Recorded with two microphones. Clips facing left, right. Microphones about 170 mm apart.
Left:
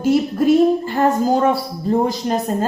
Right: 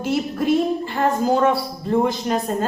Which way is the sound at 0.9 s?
40° left (ahead or behind).